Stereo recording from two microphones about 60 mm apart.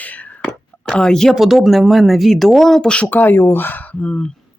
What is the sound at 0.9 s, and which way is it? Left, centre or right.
Speech, centre.